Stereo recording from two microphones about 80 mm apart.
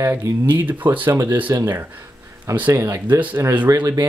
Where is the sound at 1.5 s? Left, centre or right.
Right.